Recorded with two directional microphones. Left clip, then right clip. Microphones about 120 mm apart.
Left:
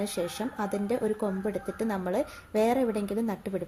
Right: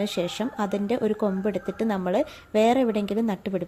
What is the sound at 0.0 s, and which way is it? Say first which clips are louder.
Speech: right 4 dB; 40° right (ahead or behind).